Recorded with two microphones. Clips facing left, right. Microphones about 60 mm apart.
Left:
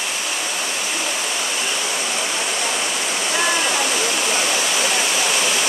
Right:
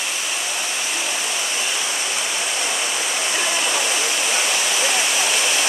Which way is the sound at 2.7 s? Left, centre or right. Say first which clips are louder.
Left 1 dB; centre.